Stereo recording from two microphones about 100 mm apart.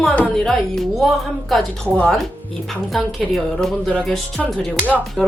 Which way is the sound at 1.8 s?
10° left (ahead or behind).